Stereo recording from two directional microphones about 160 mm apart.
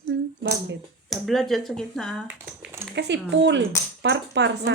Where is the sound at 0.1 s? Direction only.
90° right.